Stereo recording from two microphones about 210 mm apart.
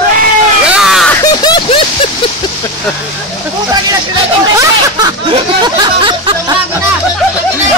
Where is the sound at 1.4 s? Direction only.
20° left (ahead or behind).